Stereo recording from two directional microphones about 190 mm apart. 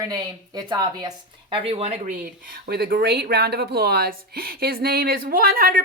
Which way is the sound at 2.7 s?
55° right (ahead or behind).